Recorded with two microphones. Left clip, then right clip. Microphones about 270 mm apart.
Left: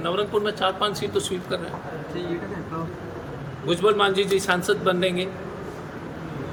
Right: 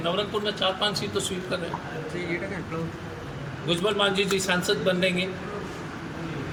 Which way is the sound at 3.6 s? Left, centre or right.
Centre.